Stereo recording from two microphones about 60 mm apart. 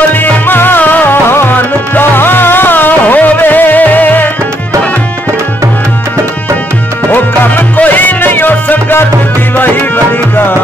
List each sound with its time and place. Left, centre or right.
0.2 s music: left
7.1 s music: left